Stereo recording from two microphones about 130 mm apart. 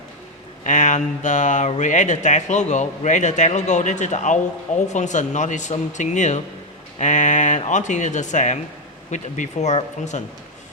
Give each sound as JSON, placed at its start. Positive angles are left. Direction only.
{"t": 0.6, "sound": "speech", "side_deg": 70}